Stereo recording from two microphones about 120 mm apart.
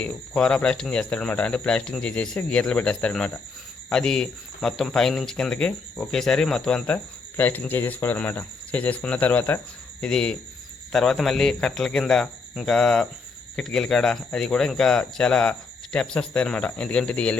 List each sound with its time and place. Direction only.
0.0 s speech: 10° left (ahead or behind)